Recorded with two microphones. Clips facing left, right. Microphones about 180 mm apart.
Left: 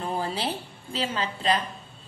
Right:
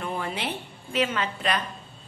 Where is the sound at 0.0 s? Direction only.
35° left (ahead or behind).